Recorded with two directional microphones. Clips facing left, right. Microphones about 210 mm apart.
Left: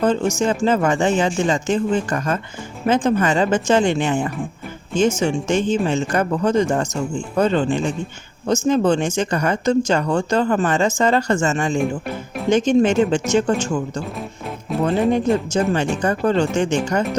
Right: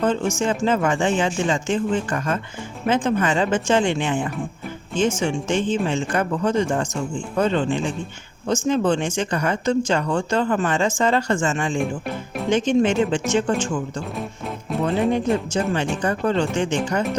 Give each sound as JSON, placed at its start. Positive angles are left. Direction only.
{"t": 0.0, "sound": "speech", "side_deg": 40}
{"t": 11.8, "sound": "speech", "side_deg": 0}
{"t": 12.5, "sound": "speech", "side_deg": 40}
{"t": 14.7, "sound": "music", "side_deg": 0}
{"t": 15.3, "sound": "speech", "side_deg": 0}
{"t": 16.0, "sound": "speech", "side_deg": 40}